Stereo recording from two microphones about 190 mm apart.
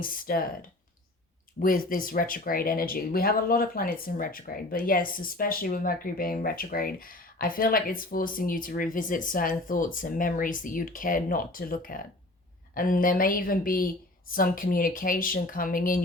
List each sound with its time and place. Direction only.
0.0 s speech: 50° left (ahead or behind)
1.5 s speech: 45° left (ahead or behind)